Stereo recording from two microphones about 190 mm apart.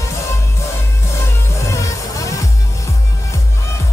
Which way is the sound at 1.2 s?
15° left (ahead or behind).